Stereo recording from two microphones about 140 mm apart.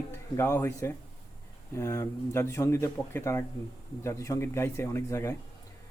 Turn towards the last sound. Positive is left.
turn(degrees=20)  # may be behind; listen again after turning